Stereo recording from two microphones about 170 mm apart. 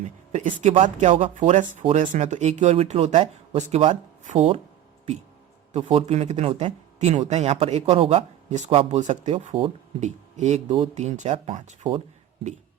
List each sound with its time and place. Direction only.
0.0 s a sound: 45° right (ahead or behind)
0.9 s speech: 45° right (ahead or behind)
5.7 s speech: 35° right (ahead or behind)
9.4 s speech: 30° right (ahead or behind)
10.0 s speech: 40° right (ahead or behind)
11.9 s a sound: 40° right (ahead or behind)